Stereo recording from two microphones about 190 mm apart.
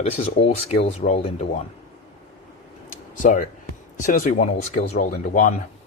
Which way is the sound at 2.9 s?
45° left (ahead or behind).